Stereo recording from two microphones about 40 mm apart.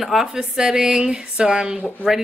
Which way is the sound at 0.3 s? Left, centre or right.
Centre.